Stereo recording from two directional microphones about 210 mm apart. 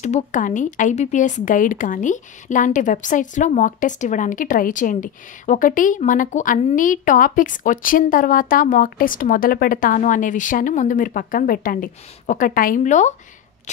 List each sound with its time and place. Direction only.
0.0 s speech: 35° left (ahead or behind)